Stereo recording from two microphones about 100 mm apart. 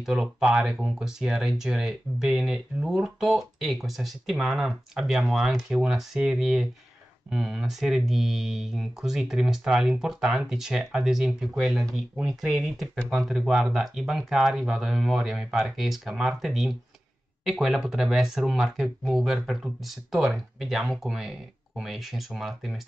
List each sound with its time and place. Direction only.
0.0 s speech: 5° right (ahead or behind)